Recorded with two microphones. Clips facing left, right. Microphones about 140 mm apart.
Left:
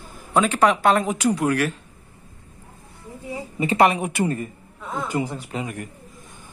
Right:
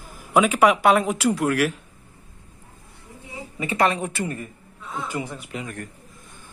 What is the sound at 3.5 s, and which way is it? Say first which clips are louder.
Speech: left 5 dB; 30° left (ahead or behind).